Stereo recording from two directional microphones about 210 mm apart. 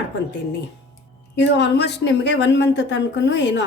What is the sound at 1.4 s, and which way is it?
A woman's voice, 55° left (ahead or behind).